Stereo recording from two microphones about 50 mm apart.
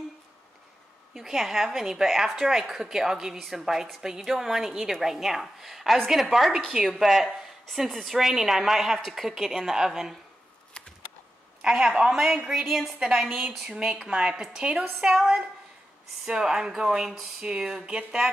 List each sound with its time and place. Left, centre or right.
1.1 s a woman's voice: centre
2.2 s a woman's voice: centre
10.8 s a sound: centre
11.6 s a woman's voice: centre
13.7 s a woman's voice: centre
14.6 s a woman's voice: right
15.0 s a woman's voice: centre